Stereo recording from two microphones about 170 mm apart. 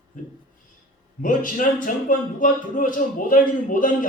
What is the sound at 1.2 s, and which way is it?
Speech, 55° left (ahead or behind).